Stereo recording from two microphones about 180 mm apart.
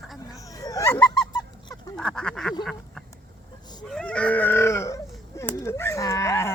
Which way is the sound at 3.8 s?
5° left (ahead or behind).